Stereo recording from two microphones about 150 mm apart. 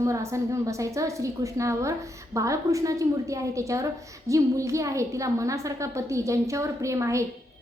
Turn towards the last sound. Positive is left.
turn(degrees=-20)  # may be behind; listen again after turning